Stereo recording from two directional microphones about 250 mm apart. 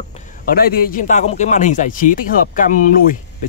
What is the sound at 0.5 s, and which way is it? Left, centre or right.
Speech, left.